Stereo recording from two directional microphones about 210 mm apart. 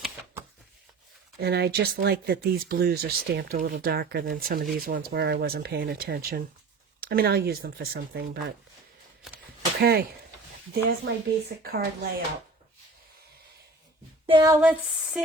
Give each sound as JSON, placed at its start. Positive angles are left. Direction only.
{"t": 1.4, "sound": "speech", "side_deg": -50}
{"t": 9.8, "sound": "speech", "side_deg": -50}
{"t": 14.3, "sound": "female singing", "side_deg": -25}
{"t": 14.5, "sound": "a sound", "side_deg": -10}